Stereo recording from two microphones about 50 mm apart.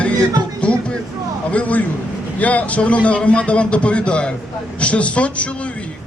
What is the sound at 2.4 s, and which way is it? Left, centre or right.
Speech, left.